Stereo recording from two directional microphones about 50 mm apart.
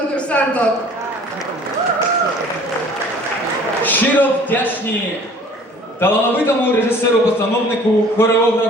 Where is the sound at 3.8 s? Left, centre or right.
Left.